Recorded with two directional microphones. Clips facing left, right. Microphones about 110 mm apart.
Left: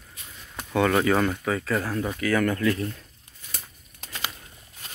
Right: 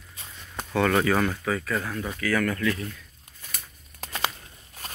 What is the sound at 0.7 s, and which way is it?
Speech, 20° left (ahead or behind).